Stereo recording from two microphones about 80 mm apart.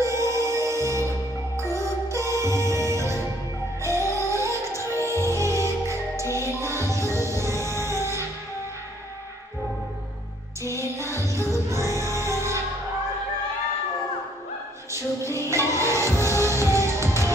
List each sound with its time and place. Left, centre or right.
0.0 s music: right
2.0 s music: right
10.7 s music: right
14.9 s music: right